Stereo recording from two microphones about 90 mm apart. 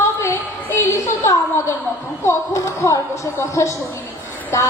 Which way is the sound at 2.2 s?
35° left (ahead or behind).